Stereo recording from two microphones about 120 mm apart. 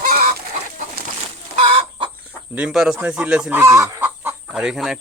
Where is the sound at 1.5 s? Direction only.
50° right (ahead or behind).